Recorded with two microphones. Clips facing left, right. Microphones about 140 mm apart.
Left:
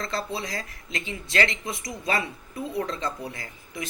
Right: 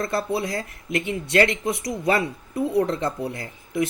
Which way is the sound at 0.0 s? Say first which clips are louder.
Right 6 dB; 55° right (ahead or behind).